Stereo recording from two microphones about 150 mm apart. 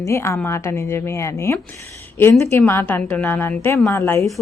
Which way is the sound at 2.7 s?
15° left (ahead or behind).